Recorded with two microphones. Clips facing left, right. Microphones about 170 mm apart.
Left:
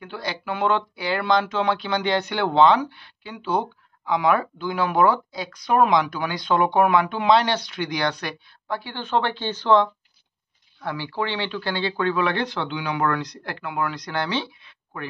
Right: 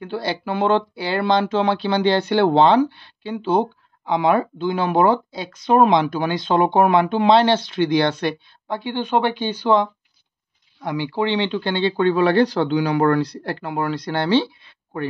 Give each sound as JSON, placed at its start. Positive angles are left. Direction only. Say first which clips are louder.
{"t": 0.0, "sound": "speech", "louder": "right 6 dB", "side_deg": -30}